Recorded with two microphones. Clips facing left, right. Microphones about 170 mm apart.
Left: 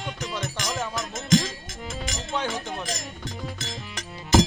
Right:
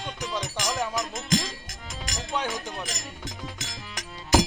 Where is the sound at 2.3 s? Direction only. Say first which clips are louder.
Left 1 dB; 15° right (ahead or behind).